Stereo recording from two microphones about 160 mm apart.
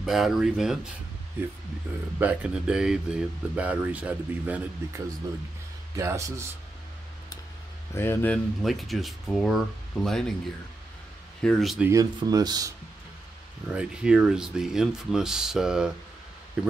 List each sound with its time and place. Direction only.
0.0 s speech: centre (ahead or behind)
2.1 s speech: 10° right (ahead or behind)
7.9 s speech: 15° left (ahead or behind)
8.6 s speech: centre (ahead or behind)
11.4 s speech: centre (ahead or behind)
11.9 s speech: 20° right (ahead or behind)
13.7 s speech: 5° right (ahead or behind)